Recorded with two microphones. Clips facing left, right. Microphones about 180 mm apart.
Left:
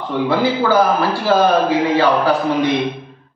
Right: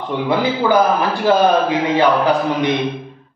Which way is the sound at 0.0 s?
15° right (ahead or behind).